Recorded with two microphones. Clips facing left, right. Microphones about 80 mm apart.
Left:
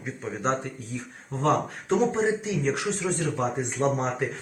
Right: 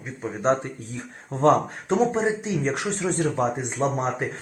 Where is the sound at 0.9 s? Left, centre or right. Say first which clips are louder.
Right 2 dB; right.